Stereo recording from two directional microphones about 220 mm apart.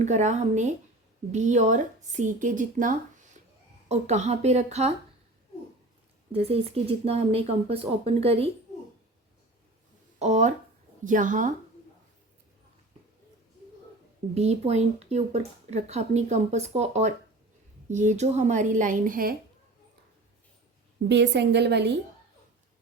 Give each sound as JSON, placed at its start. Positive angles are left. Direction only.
{"t": 0.0, "sound": "speech", "side_deg": -30}
{"t": 6.3, "sound": "a woman's voice", "side_deg": -25}
{"t": 10.2, "sound": "speech", "side_deg": -30}
{"t": 14.3, "sound": "a woman's voice", "side_deg": -30}
{"t": 21.1, "sound": "a woman's voice", "side_deg": -50}